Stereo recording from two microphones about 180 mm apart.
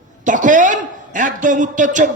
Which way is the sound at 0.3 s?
45° right (ahead or behind).